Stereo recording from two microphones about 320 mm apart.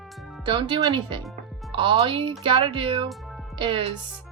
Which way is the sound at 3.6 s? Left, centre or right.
Centre.